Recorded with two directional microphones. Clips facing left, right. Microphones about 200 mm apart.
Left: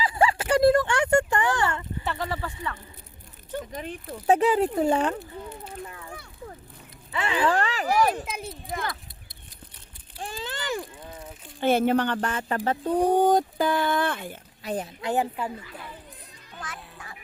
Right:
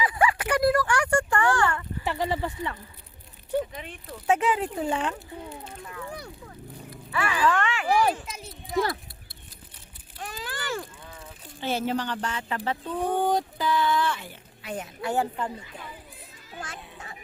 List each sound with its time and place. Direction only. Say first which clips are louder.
0.0 s a sound: left 1 dB; 25° left (ahead or behind)
2.0 s speech: right 4 dB; 15° right (ahead or behind)
3.7 s speech: left 5 dB; 45° left (ahead or behind)
7.1 s speech: left 1 dB; 25° left (ahead or behind)
8.1 s speech: left 5 dB; 55° left (ahead or behind)
10.2 s a sound: left 2 dB; 30° left (ahead or behind)
11.6 s speech: left 6 dB; 55° left (ahead or behind)
15.0 s a woman's voice: even; 15° left (ahead or behind)
16.6 s music: right 1 dB; 25° right (ahead or behind)